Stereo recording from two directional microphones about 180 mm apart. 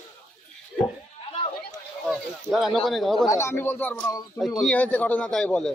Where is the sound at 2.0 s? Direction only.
Centre (ahead or behind).